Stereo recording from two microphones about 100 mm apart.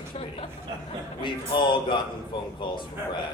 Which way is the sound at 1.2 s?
50° left (ahead or behind).